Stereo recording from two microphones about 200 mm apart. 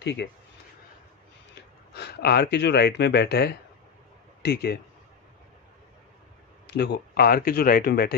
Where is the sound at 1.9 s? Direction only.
55° left (ahead or behind).